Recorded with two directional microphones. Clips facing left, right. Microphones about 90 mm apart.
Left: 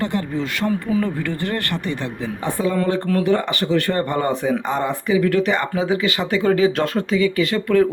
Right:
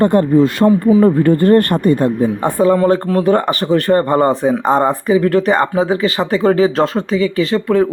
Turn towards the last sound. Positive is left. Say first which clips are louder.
# right 3 dB
turn(degrees=-30)  # may be behind; listen again after turning